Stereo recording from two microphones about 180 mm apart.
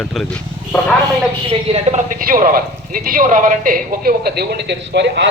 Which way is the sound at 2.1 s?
50° right (ahead or behind).